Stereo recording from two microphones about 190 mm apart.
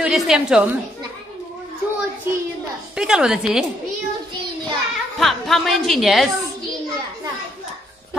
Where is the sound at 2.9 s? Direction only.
5° right (ahead or behind).